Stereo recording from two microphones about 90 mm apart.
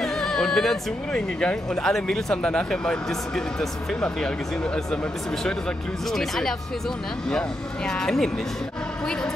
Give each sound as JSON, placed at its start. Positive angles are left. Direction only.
{"t": 0.0, "sound": "speech", "side_deg": 5}
{"t": 6.1, "sound": "speech", "side_deg": 5}